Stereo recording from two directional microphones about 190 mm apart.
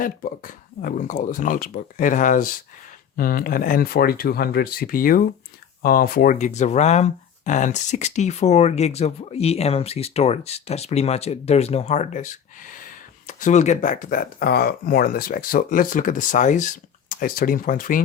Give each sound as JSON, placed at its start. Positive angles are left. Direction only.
{"t": 0.0, "sound": "speech", "side_deg": 45}